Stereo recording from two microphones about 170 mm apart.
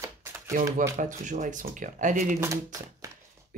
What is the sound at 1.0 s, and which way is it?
Speech, 50° right (ahead or behind).